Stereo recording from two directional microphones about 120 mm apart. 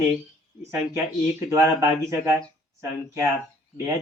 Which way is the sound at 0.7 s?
20° right (ahead or behind).